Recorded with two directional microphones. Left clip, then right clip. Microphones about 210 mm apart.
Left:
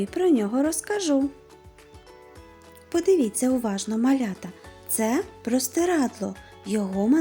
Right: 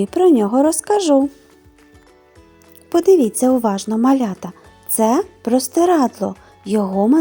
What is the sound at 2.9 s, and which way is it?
Speech, 15° right (ahead or behind).